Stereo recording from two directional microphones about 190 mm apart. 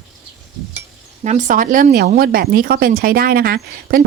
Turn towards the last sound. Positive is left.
turn(degrees=-55)  # may be behind; listen again after turning